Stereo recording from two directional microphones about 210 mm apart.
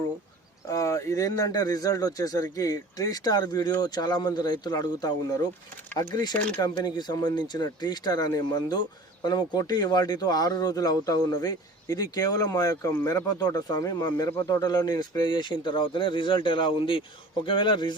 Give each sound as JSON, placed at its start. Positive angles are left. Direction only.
{"t": 0.7, "sound": "speech", "side_deg": 15}